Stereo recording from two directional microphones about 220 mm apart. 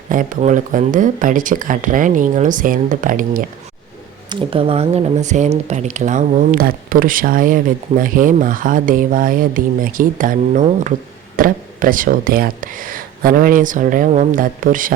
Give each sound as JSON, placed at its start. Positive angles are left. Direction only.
{"t": 0.1, "sound": "speech", "side_deg": -35}
{"t": 4.3, "sound": "speech", "side_deg": -25}